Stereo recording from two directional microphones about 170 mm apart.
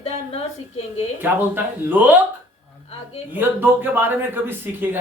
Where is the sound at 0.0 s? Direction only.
35° left (ahead or behind).